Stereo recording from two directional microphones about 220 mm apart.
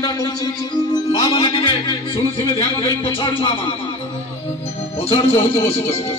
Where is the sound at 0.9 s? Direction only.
20° left (ahead or behind).